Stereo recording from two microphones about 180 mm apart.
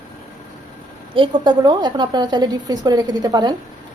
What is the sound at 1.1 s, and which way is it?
A woman's voice, 25° right (ahead or behind).